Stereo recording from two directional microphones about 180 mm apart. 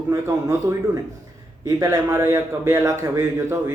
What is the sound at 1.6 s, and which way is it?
Speech, 15° right (ahead or behind).